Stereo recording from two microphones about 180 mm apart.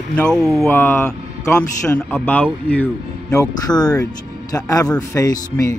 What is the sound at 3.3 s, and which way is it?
Speech, 20° left (ahead or behind).